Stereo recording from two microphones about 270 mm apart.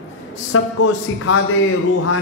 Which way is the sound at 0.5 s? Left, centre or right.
Left.